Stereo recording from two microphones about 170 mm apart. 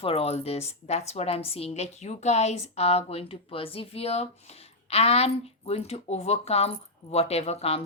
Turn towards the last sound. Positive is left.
turn(degrees=35)  # may be behind; listen again after turning